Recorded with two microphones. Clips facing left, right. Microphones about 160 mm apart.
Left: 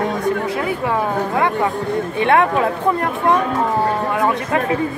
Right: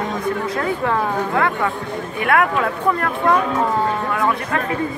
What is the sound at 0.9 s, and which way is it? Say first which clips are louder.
Speech: left 1 dB; 20° left (ahead or behind).